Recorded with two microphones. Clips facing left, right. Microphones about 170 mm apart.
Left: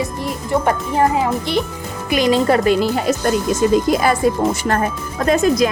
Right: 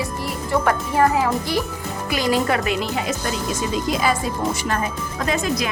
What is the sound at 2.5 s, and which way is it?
Speech, 35° left (ahead or behind).